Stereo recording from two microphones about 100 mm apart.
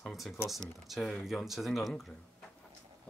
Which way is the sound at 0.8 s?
Centre (ahead or behind).